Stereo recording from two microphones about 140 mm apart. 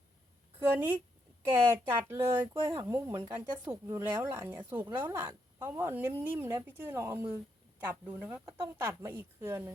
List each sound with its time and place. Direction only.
0.6 s speech: 15° right (ahead or behind)